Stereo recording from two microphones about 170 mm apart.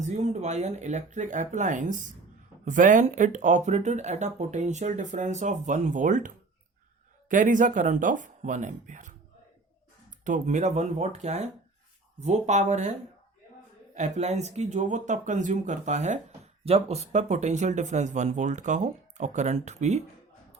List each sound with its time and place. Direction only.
0.0 s speech: 40° right (ahead or behind)
13.9 s speech: 45° right (ahead or behind)